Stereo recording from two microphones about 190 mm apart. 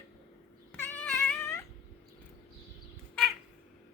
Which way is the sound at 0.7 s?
10° left (ahead or behind).